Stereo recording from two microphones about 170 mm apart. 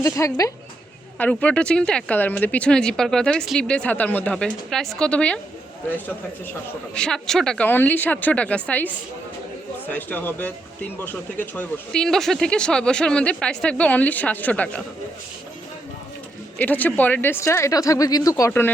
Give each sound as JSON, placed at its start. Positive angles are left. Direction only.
{"t": 0.0, "sound": "speech", "side_deg": 20}
{"t": 1.2, "sound": "speech", "side_deg": 5}
{"t": 6.9, "sound": "speech", "side_deg": 5}
{"t": 16.6, "sound": "speech", "side_deg": 10}